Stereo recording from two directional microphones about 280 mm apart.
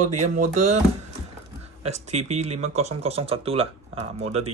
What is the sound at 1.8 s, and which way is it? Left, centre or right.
Speech, right.